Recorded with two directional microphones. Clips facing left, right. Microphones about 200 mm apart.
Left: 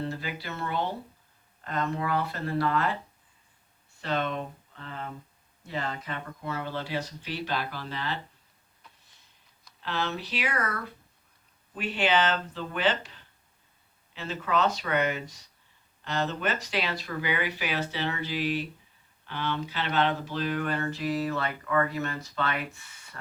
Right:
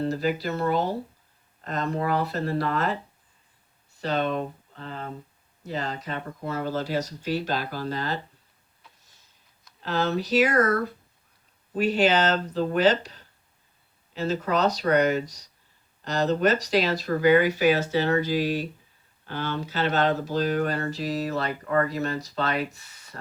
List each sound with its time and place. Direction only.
0.0 s speech: 40° right (ahead or behind)
9.8 s speech: 40° right (ahead or behind)